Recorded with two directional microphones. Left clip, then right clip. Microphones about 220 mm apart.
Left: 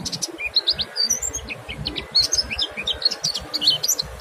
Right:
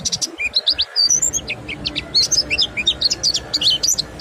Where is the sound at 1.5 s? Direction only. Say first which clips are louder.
Right 5 dB; 15° right (ahead or behind).